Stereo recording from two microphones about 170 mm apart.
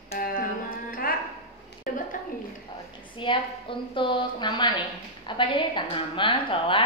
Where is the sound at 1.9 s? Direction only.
55° left (ahead or behind).